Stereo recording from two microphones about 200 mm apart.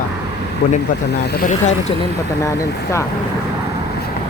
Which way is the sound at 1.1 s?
55° left (ahead or behind).